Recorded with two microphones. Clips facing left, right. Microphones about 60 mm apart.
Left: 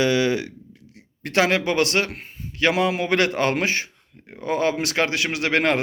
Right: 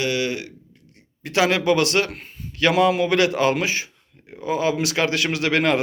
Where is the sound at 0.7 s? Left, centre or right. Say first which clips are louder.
Left 5 dB; left.